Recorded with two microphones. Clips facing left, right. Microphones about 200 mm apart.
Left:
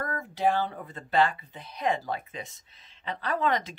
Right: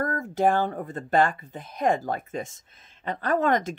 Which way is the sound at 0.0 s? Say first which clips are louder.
Right 4 dB; 45° right (ahead or behind).